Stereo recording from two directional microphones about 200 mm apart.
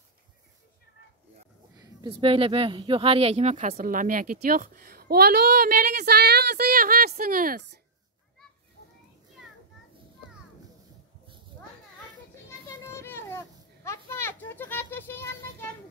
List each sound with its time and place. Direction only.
1.8 s speech: 25° right (ahead or behind); by 7.8 s 50° right (ahead or behind)
12.6 s children playing: 15° left (ahead or behind)
13.8 s a sound: 15° left (ahead or behind)